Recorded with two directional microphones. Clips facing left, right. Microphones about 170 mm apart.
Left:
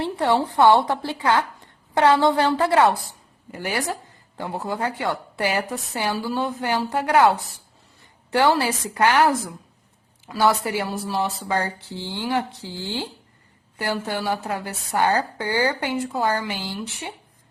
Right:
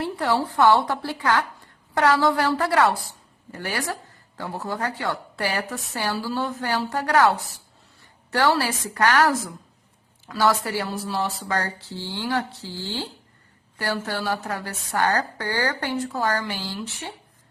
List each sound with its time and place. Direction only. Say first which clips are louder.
0.0 s a woman's voice: left 3 dB; 25° left (ahead or behind)